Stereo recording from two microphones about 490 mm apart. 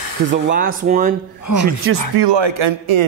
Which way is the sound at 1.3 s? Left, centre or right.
Left.